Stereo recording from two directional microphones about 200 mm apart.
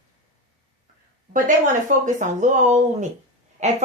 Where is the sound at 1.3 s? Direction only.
40° right (ahead or behind).